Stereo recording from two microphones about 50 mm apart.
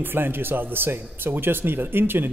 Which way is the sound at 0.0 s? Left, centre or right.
Right.